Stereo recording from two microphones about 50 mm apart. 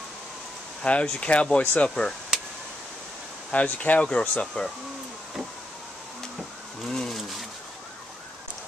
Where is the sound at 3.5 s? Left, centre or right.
Left.